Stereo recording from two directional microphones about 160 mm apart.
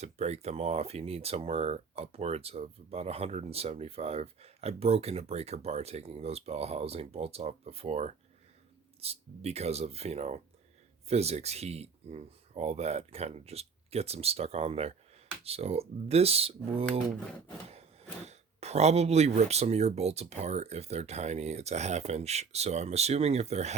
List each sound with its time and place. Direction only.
0.0 s speech: 40° right (ahead or behind)
18.3 s speech: 40° right (ahead or behind)